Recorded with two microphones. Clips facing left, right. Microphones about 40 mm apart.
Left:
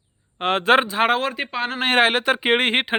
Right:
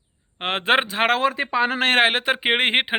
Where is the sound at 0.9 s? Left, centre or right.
Right.